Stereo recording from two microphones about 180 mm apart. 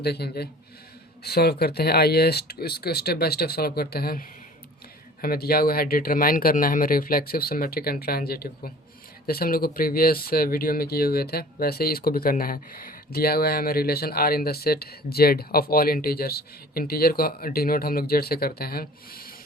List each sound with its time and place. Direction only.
0.0 s speech: 65° left (ahead or behind)
5.2 s speech: 55° left (ahead or behind)